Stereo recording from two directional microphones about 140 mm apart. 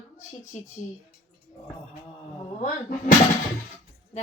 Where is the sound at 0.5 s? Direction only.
55° left (ahead or behind).